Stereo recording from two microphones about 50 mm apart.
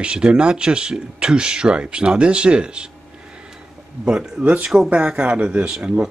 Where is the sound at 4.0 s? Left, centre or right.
Right.